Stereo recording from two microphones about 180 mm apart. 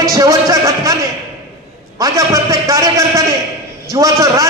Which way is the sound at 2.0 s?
20° right (ahead or behind).